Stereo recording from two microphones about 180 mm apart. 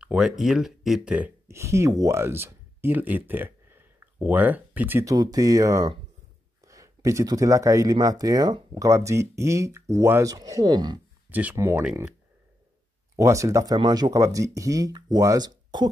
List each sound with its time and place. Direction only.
0.0 s speech: 5° right (ahead or behind); by 11.0 s 25° right (ahead or behind)
11.2 s speech: 10° right (ahead or behind)
13.1 s speech: 15° right (ahead or behind)